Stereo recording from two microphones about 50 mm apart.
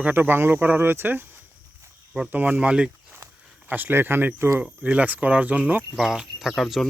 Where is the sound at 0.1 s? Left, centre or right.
Right.